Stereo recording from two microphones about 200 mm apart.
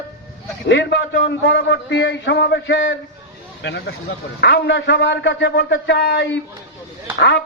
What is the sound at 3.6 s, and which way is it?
A man's voice, 55° left (ahead or behind).